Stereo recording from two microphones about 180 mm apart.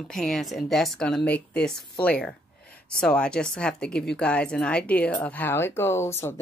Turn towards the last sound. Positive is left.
turn(degrees=15)  # may be behind; listen again after turning